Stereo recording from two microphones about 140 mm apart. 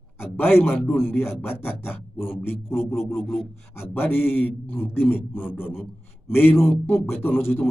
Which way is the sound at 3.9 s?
15° left (ahead or behind).